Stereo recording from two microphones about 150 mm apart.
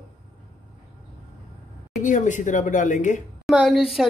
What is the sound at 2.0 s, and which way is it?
Speech, 55° left (ahead or behind).